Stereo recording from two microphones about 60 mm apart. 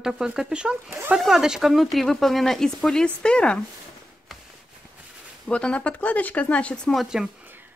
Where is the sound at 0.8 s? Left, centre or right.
Right.